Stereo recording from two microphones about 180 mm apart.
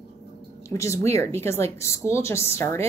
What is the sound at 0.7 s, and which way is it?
A woman's voice, 15° left (ahead or behind).